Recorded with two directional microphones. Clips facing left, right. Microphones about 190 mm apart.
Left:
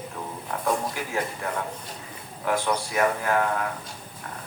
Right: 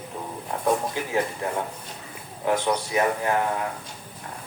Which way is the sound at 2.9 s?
20° right (ahead or behind).